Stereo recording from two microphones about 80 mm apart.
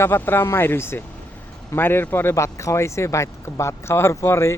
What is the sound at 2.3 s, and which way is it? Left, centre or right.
Speech, left.